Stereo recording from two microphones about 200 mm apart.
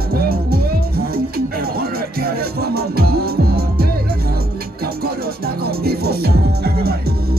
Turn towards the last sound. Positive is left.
turn(degrees=-50)  # may be behind; listen again after turning